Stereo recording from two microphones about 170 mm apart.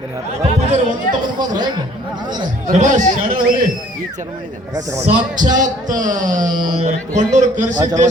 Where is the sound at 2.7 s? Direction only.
45° right (ahead or behind).